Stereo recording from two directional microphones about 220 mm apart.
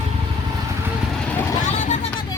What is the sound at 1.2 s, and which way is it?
Vehicle, 5° left (ahead or behind).